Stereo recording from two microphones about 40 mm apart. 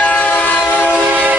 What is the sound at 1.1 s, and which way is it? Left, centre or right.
Train, right.